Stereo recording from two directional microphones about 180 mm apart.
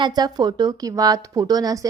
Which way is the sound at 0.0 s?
20° right (ahead or behind).